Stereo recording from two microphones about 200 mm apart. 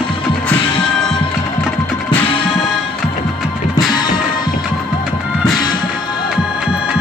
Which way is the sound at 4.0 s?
20° left (ahead or behind).